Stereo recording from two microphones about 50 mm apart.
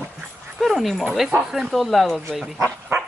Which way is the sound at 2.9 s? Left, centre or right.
Right.